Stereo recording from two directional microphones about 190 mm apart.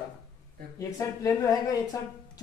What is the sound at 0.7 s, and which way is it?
Speech, 15° left (ahead or behind).